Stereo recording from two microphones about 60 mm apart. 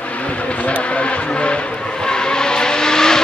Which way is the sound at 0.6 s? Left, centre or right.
Left.